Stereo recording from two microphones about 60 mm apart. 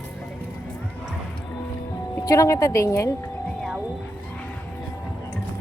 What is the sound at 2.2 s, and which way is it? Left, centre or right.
Speech, left.